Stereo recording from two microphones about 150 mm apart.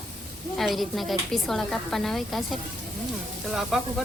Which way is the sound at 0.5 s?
Centre (ahead or behind).